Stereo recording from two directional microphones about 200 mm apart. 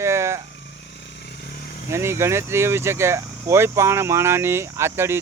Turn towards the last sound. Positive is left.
turn(degrees=-10)  # may be behind; listen again after turning